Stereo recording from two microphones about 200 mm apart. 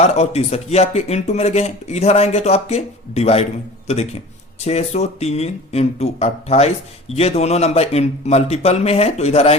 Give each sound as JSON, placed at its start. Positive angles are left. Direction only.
{"t": 0.0, "sound": "speech", "side_deg": 30}